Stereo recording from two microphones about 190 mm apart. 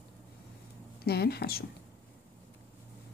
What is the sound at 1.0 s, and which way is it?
Speech, 55° left (ahead or behind).